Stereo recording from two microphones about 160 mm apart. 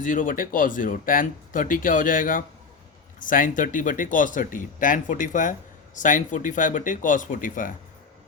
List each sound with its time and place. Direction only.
0.0 s speech: 55° left (ahead or behind)